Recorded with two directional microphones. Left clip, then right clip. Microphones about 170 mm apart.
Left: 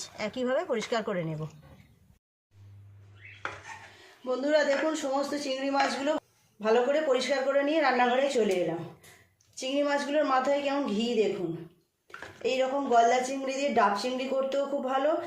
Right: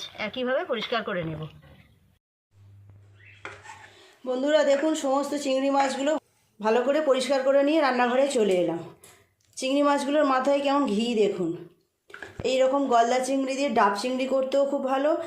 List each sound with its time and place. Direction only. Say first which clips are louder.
0.0 s speech: right 2 dB; 15° left (ahead or behind)
4.2 s speech: right 3 dB; 45° right (ahead or behind)
9.6 s speech: right 5 dB; 45° right (ahead or behind)